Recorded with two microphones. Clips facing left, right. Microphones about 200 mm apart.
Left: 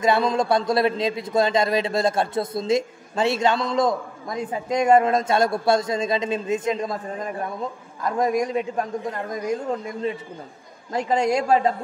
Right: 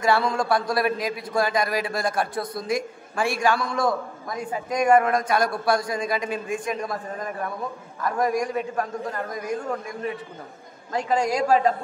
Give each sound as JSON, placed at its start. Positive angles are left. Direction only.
{"t": 0.0, "sound": "a man's voice", "side_deg": 20}